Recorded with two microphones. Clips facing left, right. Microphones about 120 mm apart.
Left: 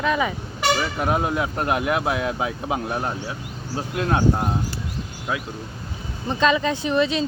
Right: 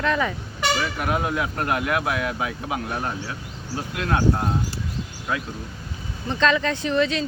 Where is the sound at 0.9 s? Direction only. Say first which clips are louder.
Left 2 dB; 25° left (ahead or behind).